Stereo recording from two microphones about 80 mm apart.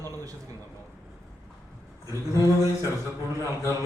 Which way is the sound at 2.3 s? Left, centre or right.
Left.